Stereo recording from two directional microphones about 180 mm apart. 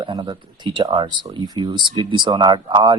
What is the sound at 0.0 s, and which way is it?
Speech, 25° right (ahead or behind).